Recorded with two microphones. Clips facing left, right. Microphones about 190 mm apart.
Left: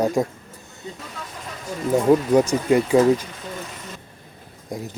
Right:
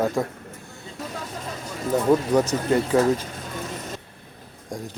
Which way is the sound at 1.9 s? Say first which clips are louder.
Left 3 dB; 10° left (ahead or behind).